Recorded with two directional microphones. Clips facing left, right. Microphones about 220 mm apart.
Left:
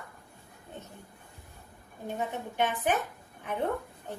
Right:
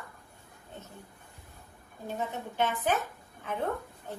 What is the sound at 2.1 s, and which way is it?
Speech, 15° left (ahead or behind).